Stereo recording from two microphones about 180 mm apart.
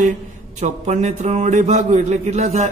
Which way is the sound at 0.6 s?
40° right (ahead or behind).